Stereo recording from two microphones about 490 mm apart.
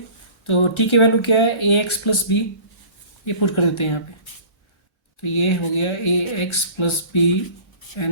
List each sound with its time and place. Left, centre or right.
0.4 s speech: left
5.2 s speech: left